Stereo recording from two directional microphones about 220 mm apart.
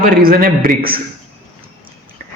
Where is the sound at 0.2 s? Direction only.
40° right (ahead or behind).